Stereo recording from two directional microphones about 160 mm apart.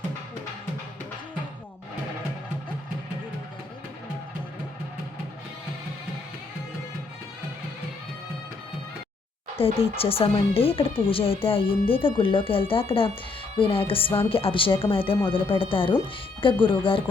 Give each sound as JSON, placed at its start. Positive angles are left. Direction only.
{"t": 9.6, "sound": "speech", "side_deg": 35}